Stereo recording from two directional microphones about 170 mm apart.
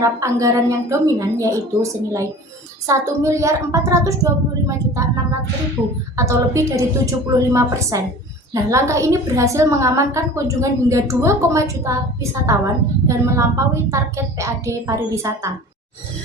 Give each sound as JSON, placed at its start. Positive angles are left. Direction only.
{"t": 0.0, "sound": "a woman's voice", "side_deg": -20}